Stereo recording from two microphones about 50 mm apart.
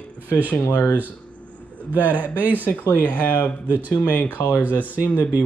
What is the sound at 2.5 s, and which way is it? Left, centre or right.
Speech, left.